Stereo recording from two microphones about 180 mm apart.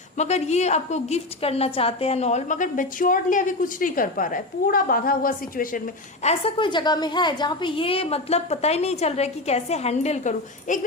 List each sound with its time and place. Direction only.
0.2 s a woman's voice: 40° left (ahead or behind)
6.4 s a woman's voice: 25° left (ahead or behind)